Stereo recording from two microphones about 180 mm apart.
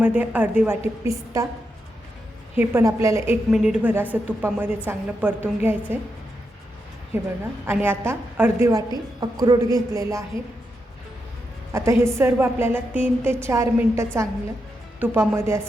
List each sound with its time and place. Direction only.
0.0 s a woman's voice: 10° right (ahead or behind)
2.6 s a woman's voice: 15° right (ahead or behind)
3.5 s a woman's voice: 5° right (ahead or behind)
7.7 s a woman's voice: 10° right (ahead or behind)
11.7 s a woman's voice: 15° right (ahead or behind)